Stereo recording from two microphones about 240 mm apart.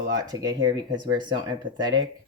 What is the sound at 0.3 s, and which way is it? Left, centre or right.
Speech, centre.